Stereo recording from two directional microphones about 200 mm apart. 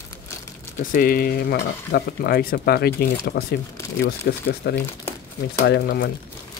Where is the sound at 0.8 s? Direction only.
45° left (ahead or behind).